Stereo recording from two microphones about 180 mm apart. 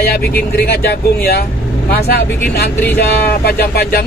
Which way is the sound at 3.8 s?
55° left (ahead or behind).